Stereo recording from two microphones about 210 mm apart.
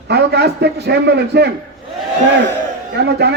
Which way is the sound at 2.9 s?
50° right (ahead or behind).